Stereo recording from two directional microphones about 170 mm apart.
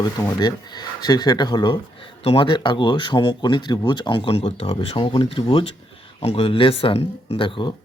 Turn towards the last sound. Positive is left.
turn(degrees=30)  # may be behind; listen again after turning